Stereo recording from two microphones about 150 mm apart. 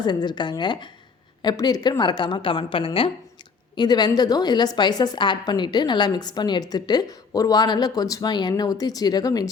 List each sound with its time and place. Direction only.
0.0 s a woman's voice: 30° left (ahead or behind)